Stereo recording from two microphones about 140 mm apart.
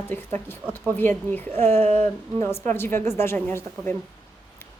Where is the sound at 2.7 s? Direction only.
15° left (ahead or behind).